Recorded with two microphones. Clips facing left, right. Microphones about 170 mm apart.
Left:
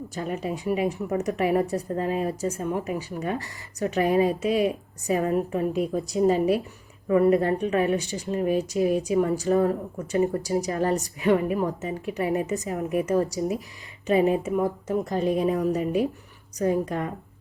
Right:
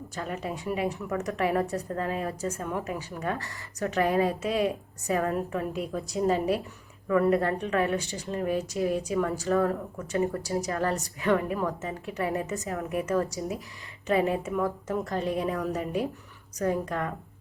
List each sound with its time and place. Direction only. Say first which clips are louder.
0.1 s a woman's voice: left 3 dB; 20° left (ahead or behind)